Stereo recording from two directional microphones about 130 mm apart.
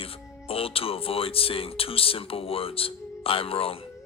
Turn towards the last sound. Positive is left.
turn(degrees=45)  # may be behind; listen again after turning